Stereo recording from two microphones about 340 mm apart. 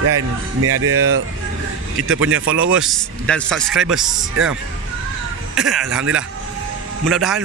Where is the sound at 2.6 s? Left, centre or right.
Centre.